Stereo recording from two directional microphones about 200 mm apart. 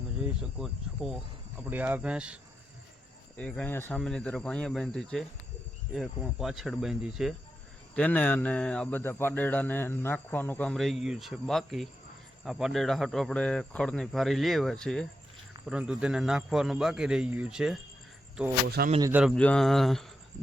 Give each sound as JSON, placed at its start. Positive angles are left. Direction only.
{"t": 1.5, "sound": "speech", "side_deg": -10}
{"t": 3.3, "sound": "speech", "side_deg": 5}
{"t": 18.8, "sound": "speech", "side_deg": -50}
{"t": 19.1, "sound": "speech", "side_deg": 0}